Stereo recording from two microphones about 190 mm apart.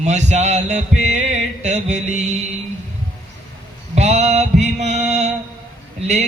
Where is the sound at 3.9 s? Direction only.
35° right (ahead or behind).